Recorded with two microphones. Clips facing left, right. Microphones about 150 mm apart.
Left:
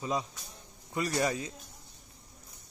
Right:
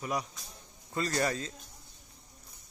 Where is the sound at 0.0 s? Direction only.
20° left (ahead or behind).